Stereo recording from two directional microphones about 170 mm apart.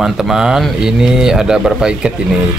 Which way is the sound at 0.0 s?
5° right (ahead or behind).